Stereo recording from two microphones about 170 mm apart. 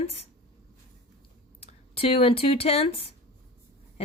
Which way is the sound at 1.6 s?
35° left (ahead or behind).